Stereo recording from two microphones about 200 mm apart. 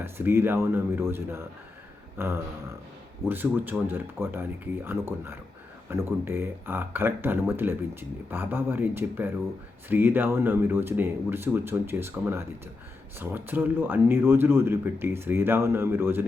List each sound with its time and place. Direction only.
0.0 s speech: 10° right (ahead or behind)
2.1 s a sound: 10° right (ahead or behind)
3.2 s speech: 10° right (ahead or behind)